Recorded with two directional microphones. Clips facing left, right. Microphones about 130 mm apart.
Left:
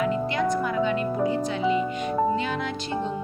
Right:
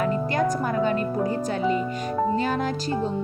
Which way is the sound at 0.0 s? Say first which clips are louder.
Right 1 dB; 45° right (ahead or behind).